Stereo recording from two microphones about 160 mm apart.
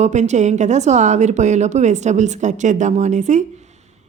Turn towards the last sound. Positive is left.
turn(degrees=-45)  # may be behind; listen again after turning